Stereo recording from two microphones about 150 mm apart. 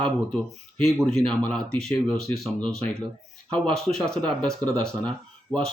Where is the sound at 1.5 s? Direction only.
5° left (ahead or behind).